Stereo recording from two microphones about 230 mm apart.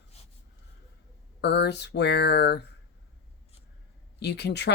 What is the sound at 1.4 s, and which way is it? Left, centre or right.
Speech, left.